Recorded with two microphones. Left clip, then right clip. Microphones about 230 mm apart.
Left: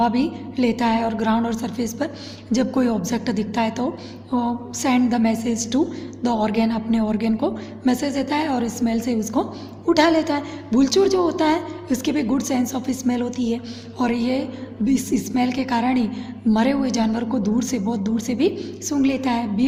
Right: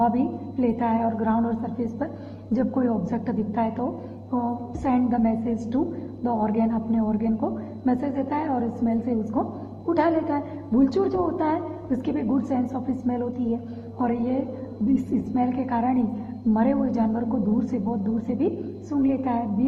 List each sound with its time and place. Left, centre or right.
0.0 s a woman's voice: left